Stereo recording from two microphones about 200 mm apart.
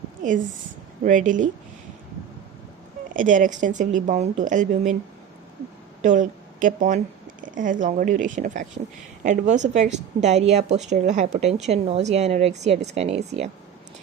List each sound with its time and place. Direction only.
1.0 s a woman's voice: 40° right (ahead or behind)
3.1 s a woman's voice: 40° right (ahead or behind)
6.0 s a woman's voice: 40° right (ahead or behind)